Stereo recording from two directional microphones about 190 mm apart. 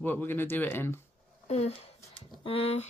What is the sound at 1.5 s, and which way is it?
A child's voice, 35° left (ahead or behind).